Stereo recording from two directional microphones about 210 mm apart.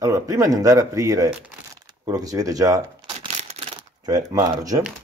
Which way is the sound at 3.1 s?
30° right (ahead or behind).